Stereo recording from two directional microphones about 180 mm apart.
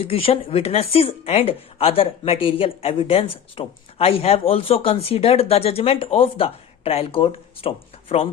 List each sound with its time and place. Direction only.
0.0 s speech: 35° left (ahead or behind)